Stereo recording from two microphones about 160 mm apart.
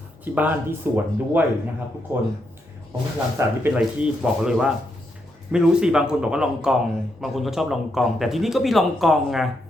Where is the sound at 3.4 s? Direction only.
10° right (ahead or behind).